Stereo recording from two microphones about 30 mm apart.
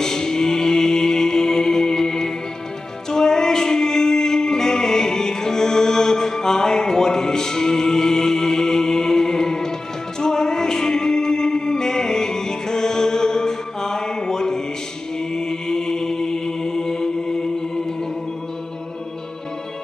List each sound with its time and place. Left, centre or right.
0.0 s music: centre
15.1 s mantra: left